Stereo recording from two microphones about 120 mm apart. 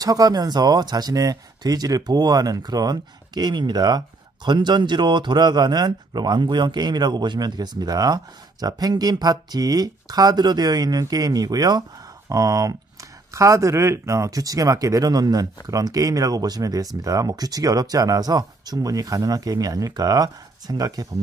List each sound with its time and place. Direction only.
0.0 s speech: 30° right (ahead or behind)